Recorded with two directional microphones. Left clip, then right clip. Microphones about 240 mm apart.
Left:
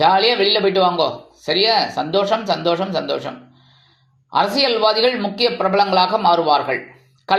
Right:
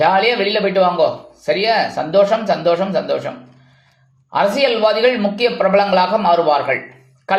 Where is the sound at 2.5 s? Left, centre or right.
Centre.